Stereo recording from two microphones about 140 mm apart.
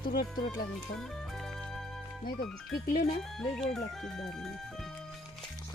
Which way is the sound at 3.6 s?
5° left (ahead or behind).